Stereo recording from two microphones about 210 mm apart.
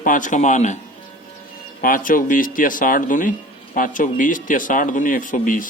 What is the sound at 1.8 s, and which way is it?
Speech, 40° left (ahead or behind).